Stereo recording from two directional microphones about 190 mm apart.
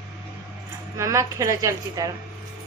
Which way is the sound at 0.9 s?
15° right (ahead or behind).